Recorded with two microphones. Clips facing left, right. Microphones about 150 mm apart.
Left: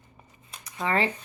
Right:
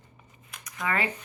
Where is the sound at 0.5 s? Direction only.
30° left (ahead or behind).